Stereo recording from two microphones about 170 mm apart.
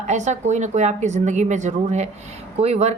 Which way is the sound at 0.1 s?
45° right (ahead or behind).